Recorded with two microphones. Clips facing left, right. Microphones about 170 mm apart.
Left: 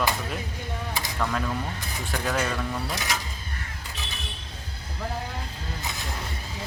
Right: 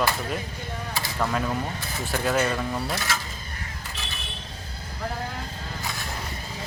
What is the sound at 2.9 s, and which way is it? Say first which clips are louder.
Speech: right 1 dB; 15° left (ahead or behind).